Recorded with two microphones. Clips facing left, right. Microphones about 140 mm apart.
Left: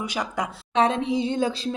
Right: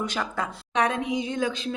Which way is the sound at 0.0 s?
10° left (ahead or behind).